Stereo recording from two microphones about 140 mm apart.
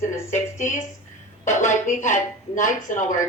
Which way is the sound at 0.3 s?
55° left (ahead or behind).